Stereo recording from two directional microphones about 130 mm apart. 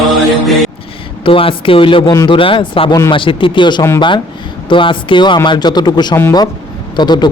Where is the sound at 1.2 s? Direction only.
45° left (ahead or behind); by 6.4 s 25° left (ahead or behind).